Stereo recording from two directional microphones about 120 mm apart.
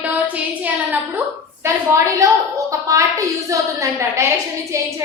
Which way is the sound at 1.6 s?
25° right (ahead or behind).